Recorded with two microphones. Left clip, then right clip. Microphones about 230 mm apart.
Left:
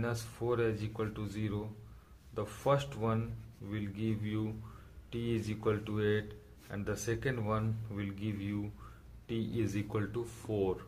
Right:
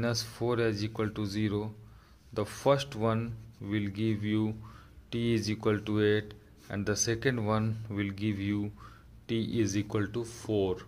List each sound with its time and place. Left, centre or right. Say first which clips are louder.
0.0 s speech: right 5 dB; right